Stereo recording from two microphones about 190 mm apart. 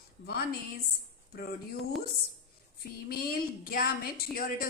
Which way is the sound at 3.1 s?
50° left (ahead or behind).